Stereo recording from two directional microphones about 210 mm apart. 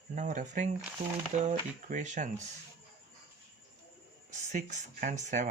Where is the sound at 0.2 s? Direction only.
35° right (ahead or behind).